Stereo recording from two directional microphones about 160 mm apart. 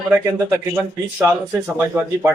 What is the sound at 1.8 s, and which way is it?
Speech, 10° right (ahead or behind).